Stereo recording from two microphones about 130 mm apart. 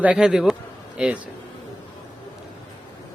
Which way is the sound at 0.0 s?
10° right (ahead or behind).